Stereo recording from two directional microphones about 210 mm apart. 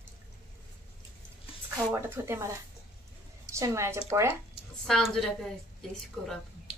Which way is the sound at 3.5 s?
15° right (ahead or behind).